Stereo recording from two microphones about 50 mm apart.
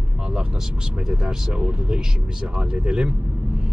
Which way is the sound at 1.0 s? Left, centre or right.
Centre.